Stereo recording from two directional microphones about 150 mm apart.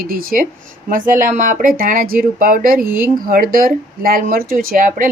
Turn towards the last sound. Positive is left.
turn(degrees=-65)  # may be behind; listen again after turning